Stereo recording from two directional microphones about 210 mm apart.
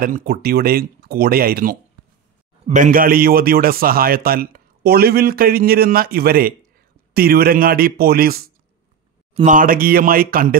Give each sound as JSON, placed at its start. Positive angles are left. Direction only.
{"t": 0.0, "sound": "a man's voice", "side_deg": -45}
{"t": 9.3, "sound": "a man's voice", "side_deg": -35}